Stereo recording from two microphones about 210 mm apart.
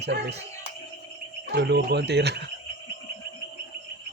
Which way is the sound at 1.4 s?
55° right (ahead or behind).